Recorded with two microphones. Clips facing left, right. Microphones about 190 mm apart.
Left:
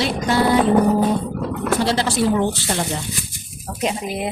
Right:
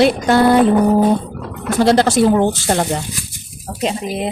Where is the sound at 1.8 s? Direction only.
50° right (ahead or behind).